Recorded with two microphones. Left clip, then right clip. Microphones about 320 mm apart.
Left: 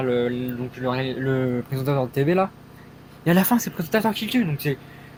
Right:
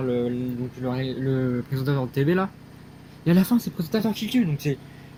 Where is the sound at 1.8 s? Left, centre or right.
Centre.